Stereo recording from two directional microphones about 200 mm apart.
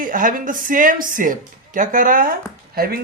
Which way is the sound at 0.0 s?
40° right (ahead or behind).